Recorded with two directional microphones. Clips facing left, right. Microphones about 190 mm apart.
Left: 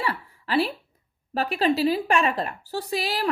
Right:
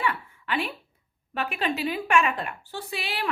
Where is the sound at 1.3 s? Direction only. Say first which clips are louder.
Left 6 dB; 35° left (ahead or behind).